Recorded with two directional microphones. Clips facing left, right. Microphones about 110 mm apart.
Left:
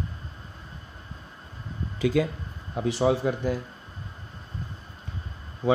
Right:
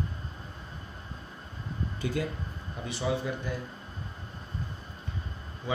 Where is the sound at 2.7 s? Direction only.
75° left (ahead or behind).